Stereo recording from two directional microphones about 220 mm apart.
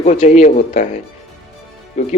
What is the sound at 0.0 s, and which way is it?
Speech, 35° left (ahead or behind).